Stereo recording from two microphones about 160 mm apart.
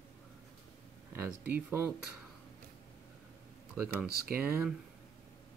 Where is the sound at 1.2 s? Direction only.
10° right (ahead or behind).